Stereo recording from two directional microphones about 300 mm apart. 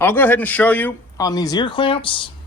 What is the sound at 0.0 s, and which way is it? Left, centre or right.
Speech, centre.